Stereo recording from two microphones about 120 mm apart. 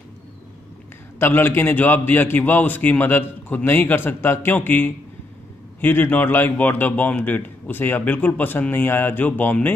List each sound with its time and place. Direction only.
1.2 s a man's voice: 20° left (ahead or behind)